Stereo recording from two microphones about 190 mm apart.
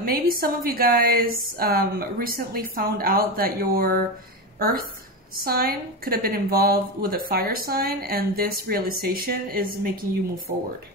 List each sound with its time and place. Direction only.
0.0 s a woman's voice: 50° right (ahead or behind)